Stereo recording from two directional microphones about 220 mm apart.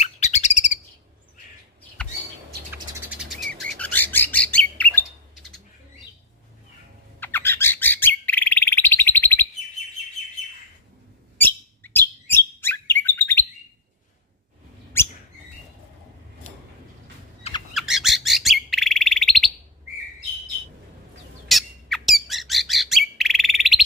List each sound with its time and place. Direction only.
0.0 s bird: 30° left (ahead or behind)
2.7 s bird: 5° right (ahead or behind)
7.2 s bird: 10° left (ahead or behind)
11.3 s chirp: 10° left (ahead or behind)
15.0 s rodents: 10° left (ahead or behind)
17.4 s bird: 25° left (ahead or behind)
17.7 s bird: centre (ahead or behind)
21.5 s bird: centre (ahead or behind)